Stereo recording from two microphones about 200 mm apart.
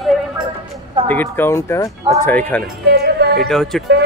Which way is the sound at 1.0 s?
10° left (ahead or behind).